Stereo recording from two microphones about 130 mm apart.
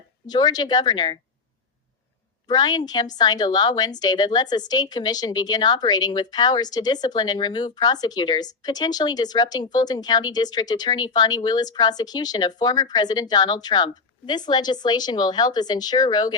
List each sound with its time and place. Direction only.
0.3 s speech: 30° left (ahead or behind)
2.5 s speech: 35° left (ahead or behind)